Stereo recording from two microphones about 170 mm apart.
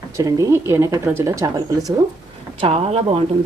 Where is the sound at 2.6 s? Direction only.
35° right (ahead or behind).